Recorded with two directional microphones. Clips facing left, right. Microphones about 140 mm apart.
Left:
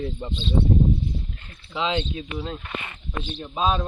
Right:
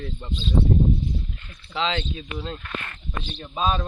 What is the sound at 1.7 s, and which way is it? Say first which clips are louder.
Speech: left 1 dB; 10° left (ahead or behind).